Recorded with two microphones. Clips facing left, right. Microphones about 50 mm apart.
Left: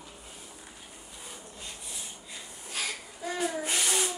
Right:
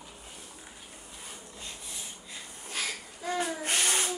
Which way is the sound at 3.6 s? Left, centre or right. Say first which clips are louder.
Right 1 dB; right.